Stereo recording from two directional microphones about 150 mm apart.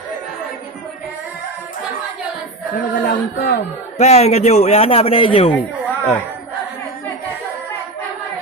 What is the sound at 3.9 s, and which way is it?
A man's voice, 45° left (ahead or behind).